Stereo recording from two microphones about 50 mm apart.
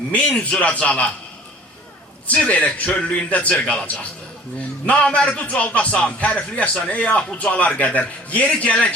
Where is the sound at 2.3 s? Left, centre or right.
Left.